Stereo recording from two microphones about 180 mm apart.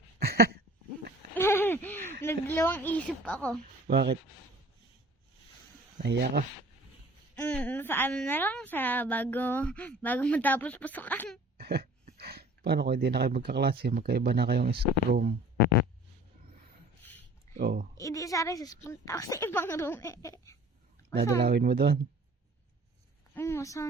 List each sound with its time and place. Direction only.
0.2 s a sound: 60° right (ahead or behind)
1.4 s a sound: 15° left (ahead or behind)
2.2 s a woman's voice: 15° left (ahead or behind)
3.8 s speech: 60° right (ahead or behind)
6.0 s speech: 65° right (ahead or behind)
7.4 s a woman's voice: 5° left (ahead or behind)
11.5 s speech: 60° right (ahead or behind)
17.6 s speech: 60° right (ahead or behind)
17.9 s a woman's voice: 20° left (ahead or behind)
21.4 s speech: 60° right (ahead or behind)
23.3 s a woman's voice: 15° left (ahead or behind)